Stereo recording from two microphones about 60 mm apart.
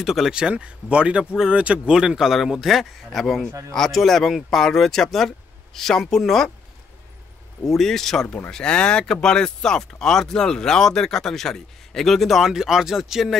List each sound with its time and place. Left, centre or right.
0.0 s speech: centre
0.4 s speech: centre
2.0 s speech: centre
7.6 s speech: centre